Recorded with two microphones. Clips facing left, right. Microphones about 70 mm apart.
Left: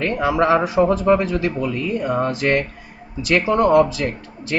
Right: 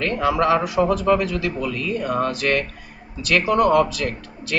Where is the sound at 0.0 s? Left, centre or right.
Centre.